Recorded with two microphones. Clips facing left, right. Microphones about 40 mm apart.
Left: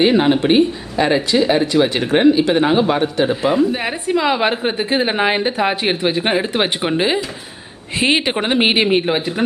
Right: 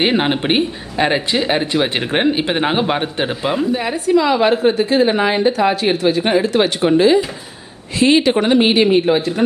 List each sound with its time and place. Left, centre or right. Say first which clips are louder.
0.0 s speech: left 3 dB; right
3.7 s a woman's voice: right 3 dB; left